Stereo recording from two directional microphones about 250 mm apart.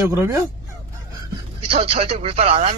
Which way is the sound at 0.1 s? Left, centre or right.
Centre.